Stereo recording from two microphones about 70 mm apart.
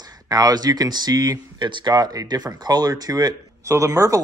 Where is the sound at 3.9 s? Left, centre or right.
Right.